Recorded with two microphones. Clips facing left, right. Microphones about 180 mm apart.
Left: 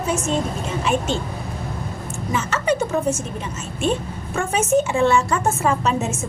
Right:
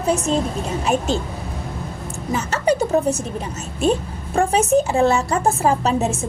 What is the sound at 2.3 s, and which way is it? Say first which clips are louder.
Speech: right 2 dB; 35° right (ahead or behind).